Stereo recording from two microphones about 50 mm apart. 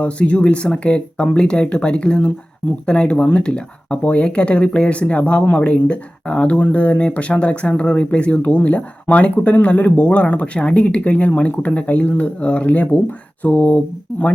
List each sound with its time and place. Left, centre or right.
0.0 s speech: left